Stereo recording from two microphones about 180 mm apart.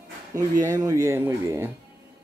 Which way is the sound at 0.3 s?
20° right (ahead or behind).